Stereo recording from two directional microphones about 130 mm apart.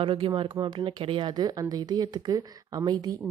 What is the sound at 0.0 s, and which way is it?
A woman's voice, 45° right (ahead or behind).